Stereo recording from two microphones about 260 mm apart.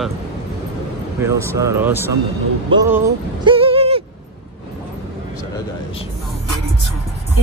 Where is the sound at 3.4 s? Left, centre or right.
Right.